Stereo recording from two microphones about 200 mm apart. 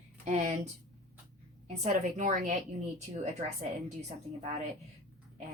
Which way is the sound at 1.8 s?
35° right (ahead or behind).